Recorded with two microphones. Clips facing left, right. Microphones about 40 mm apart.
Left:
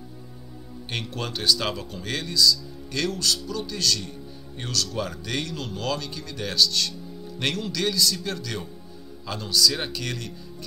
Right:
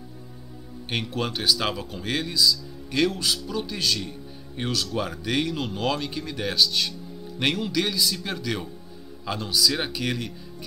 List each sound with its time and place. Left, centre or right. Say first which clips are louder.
0.8 s speech: right 3 dB; centre